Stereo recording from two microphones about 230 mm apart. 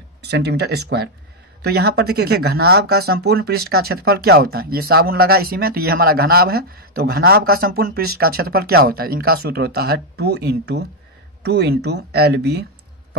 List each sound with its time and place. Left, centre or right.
0.2 s speech: right